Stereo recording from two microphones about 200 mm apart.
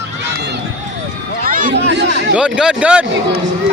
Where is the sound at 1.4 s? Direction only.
45° right (ahead or behind).